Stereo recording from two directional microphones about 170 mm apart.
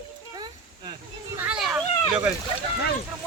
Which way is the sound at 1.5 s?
5° right (ahead or behind).